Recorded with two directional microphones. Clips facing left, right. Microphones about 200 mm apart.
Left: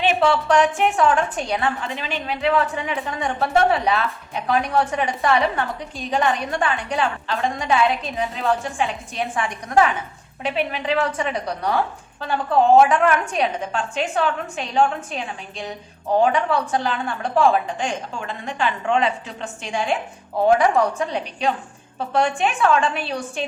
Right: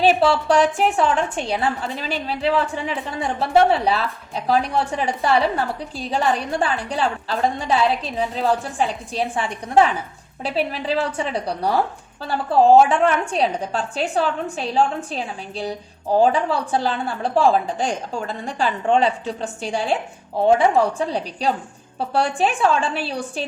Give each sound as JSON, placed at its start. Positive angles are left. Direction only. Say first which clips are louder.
{"t": 0.0, "sound": "a woman's voice", "louder": "right 2 dB", "side_deg": -35}